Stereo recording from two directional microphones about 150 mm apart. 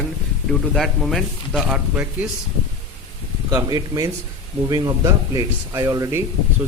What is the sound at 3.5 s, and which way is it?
Speech, 25° right (ahead or behind).